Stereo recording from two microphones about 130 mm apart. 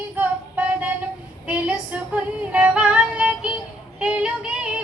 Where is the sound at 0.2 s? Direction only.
10° right (ahead or behind).